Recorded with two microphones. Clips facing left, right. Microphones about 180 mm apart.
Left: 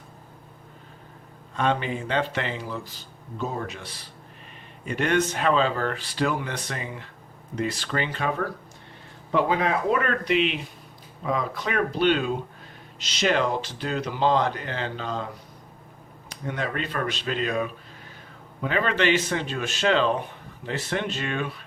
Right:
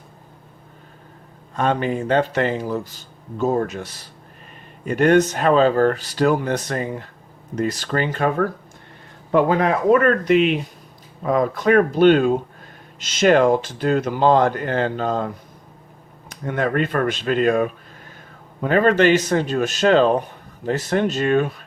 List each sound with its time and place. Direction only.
1.5 s speech: 45° right (ahead or behind)
16.3 s speech: 50° right (ahead or behind)